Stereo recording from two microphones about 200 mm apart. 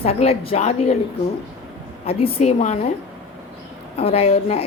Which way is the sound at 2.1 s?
30° left (ahead or behind).